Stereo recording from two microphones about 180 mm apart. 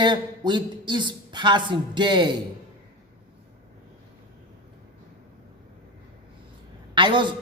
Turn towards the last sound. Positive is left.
turn(degrees=-25)  # may be behind; listen again after turning